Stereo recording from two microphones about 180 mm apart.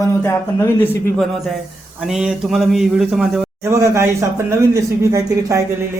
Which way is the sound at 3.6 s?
15° right (ahead or behind).